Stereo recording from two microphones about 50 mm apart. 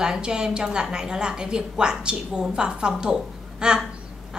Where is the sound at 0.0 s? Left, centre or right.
Centre.